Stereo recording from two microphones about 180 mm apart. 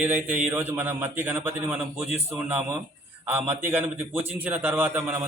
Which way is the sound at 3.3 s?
10° right (ahead or behind).